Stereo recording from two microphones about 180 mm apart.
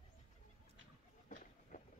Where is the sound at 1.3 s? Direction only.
45° left (ahead or behind).